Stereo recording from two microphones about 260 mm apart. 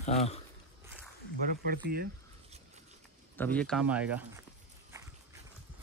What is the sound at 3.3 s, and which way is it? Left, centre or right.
Speech, centre.